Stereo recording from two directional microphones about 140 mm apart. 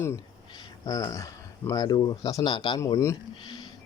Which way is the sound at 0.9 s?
25° left (ahead or behind).